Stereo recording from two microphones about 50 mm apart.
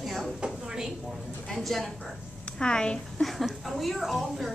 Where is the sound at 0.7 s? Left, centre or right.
Centre.